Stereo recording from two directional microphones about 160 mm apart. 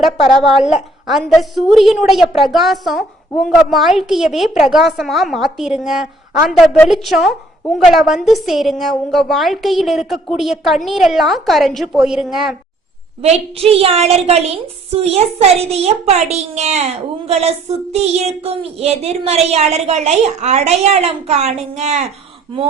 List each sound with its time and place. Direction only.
0.3 s a woman's voice: centre (ahead or behind)
13.2 s a child's voice: 40° right (ahead or behind)